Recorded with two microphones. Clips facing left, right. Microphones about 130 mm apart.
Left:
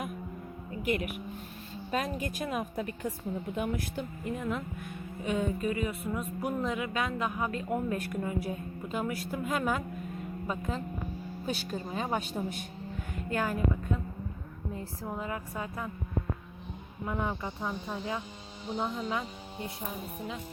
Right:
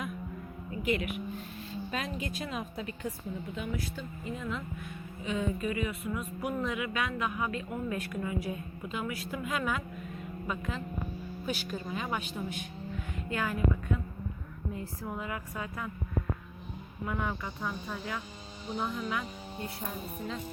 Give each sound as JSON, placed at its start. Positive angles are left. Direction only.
{"t": 1.9, "sound": "a woman's voice", "side_deg": 45}
{"t": 15.5, "sound": "speech", "side_deg": 25}
{"t": 17.1, "sound": "speech", "side_deg": 25}
{"t": 19.8, "sound": "speech", "side_deg": 10}